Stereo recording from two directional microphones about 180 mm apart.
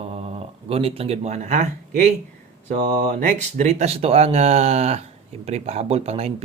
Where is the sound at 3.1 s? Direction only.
45° right (ahead or behind).